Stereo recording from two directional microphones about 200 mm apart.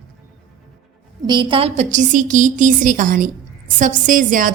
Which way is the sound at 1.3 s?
25° right (ahead or behind).